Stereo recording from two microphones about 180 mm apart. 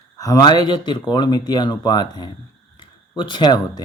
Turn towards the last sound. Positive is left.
turn(degrees=25)  # may be behind; listen again after turning